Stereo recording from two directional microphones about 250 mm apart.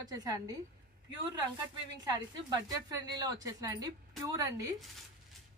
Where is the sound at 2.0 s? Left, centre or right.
Centre.